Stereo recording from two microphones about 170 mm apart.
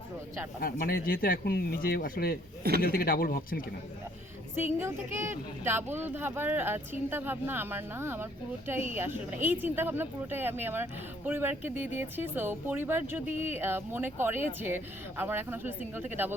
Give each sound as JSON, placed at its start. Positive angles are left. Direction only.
{"t": 0.6, "sound": "speech", "side_deg": 60}
{"t": 4.5, "sound": "speech", "side_deg": -15}